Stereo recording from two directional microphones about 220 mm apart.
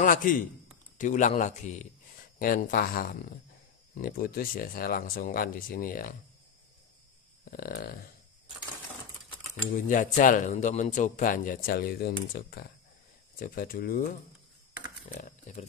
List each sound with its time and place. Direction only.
0.0 s a man's voice: 40° left (ahead or behind)
7.4 s speech: 40° left (ahead or behind)
9.7 s speech: 35° left (ahead or behind)